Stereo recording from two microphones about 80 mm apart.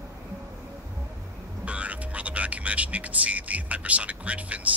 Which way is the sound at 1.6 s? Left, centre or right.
Centre.